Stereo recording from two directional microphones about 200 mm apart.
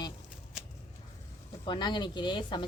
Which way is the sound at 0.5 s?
Centre (ahead or behind).